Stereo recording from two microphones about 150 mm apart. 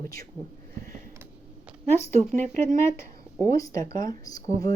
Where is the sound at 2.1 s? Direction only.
50° right (ahead or behind).